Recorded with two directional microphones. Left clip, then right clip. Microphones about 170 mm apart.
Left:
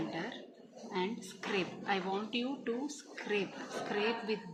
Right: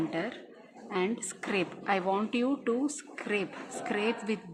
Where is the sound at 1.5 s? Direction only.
60° right (ahead or behind).